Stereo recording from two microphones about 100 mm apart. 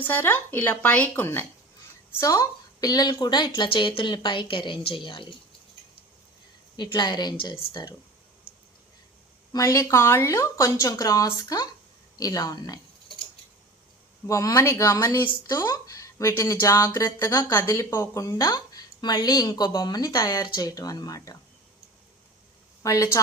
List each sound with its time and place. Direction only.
0.0 s speech: 20° left (ahead or behind)
2.2 s a woman's voice: 35° left (ahead or behind); by 5.3 s 55° left (ahead or behind)
6.7 s a woman's voice: 45° left (ahead or behind)
9.5 s speech: 35° left (ahead or behind)
14.3 s speech: 30° left (ahead or behind)
22.8 s speech: 35° left (ahead or behind)